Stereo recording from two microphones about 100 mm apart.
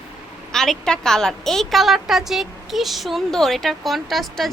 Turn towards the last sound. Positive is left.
turn(degrees=0)  # may be behind; listen again after turning